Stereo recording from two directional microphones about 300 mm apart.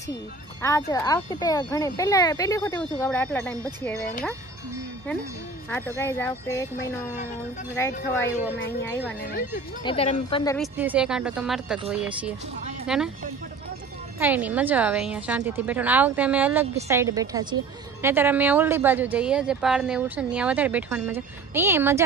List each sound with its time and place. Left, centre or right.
0.6 s speech: centre
5.7 s speech: centre
9.8 s speech: centre
10.6 s a woman's voice: centre
14.2 s a woman's voice: centre